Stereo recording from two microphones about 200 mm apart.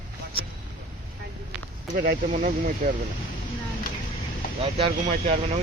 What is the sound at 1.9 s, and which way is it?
Speech, 45° right (ahead or behind).